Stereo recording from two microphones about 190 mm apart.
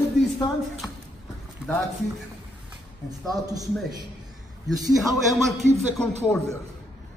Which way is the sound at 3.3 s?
20° right (ahead or behind).